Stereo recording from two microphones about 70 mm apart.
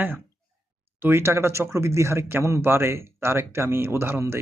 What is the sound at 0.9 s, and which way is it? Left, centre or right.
Speech, right.